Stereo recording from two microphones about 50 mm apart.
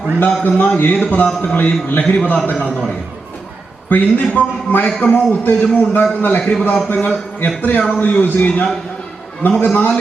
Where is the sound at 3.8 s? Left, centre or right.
Left.